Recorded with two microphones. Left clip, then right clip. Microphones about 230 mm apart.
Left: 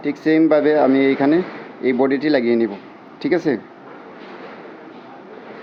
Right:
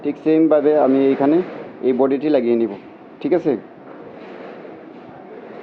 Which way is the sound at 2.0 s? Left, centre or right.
Left.